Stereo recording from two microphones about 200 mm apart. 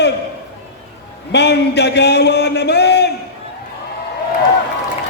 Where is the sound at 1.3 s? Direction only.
55° left (ahead or behind).